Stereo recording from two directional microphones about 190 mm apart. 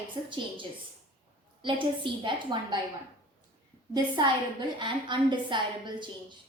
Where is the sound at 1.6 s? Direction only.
25° right (ahead or behind).